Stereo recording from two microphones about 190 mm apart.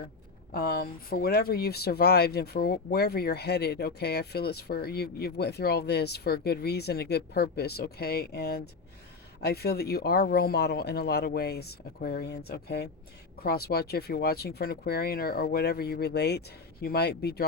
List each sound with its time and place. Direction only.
0.5 s speech: 50° left (ahead or behind)